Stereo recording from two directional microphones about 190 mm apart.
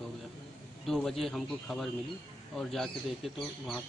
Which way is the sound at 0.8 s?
Centre (ahead or behind).